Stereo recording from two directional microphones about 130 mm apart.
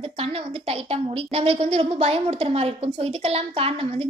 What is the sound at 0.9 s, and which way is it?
A woman's voice, 50° right (ahead or behind).